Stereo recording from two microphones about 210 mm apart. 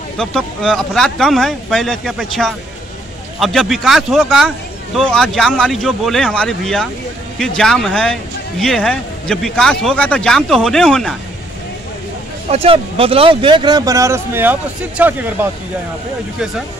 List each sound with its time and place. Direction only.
0.2 s speech: 5° left (ahead or behind)
12.4 s speech: 30° right (ahead or behind); by 15.1 s 5° right (ahead or behind)